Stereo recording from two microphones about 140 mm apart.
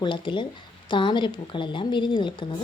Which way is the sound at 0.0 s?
35° left (ahead or behind).